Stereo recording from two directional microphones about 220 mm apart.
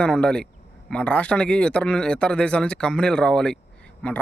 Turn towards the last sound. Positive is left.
turn(degrees=5)  # may be behind; listen again after turning